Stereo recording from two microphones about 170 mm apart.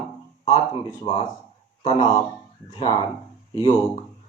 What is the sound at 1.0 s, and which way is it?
Speech, 40° left (ahead or behind).